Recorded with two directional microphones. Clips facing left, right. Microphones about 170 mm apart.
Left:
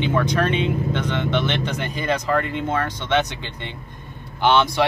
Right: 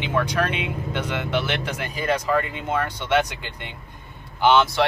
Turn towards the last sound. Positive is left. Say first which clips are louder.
# even
turn(degrees=-5)  # may be behind; listen again after turning